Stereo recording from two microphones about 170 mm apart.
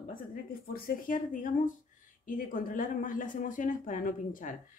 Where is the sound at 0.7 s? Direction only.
55° left (ahead or behind).